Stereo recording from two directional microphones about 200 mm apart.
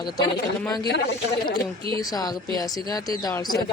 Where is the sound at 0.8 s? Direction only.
55° left (ahead or behind).